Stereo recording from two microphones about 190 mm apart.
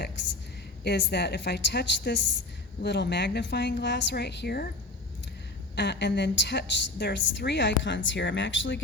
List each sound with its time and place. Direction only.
0.9 s a woman's voice: 60° left (ahead or behind)
5.7 s a woman's voice: 60° left (ahead or behind)